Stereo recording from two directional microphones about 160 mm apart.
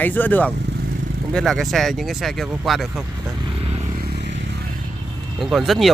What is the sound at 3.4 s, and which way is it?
Vehicle, 35° right (ahead or behind).